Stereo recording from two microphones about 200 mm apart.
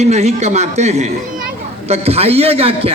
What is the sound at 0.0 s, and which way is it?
A man's voice, 35° right (ahead or behind).